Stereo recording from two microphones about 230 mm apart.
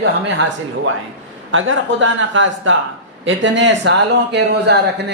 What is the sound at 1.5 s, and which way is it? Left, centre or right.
A man's voice, right.